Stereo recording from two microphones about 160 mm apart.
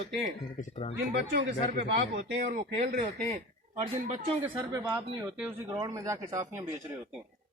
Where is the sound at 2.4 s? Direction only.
55° right (ahead or behind).